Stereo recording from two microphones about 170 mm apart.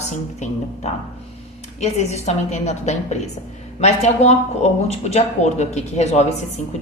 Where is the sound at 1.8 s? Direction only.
40° left (ahead or behind).